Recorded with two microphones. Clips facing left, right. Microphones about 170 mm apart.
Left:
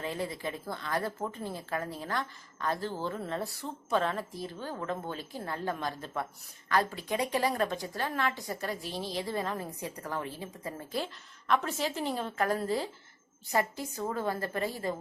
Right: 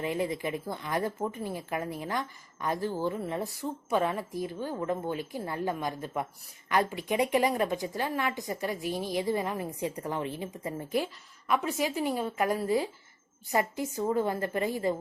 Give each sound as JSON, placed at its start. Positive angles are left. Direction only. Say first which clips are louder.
{"t": 0.0, "sound": "a woman's voice", "louder": "right 4 dB", "side_deg": -15}